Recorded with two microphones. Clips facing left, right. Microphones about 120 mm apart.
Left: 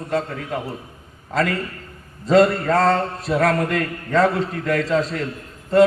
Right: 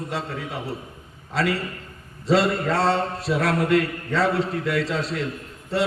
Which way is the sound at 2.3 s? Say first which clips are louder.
Left 5 dB; 45° left (ahead or behind).